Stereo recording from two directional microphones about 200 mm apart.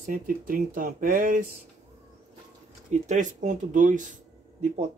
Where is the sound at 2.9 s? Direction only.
35° right (ahead or behind).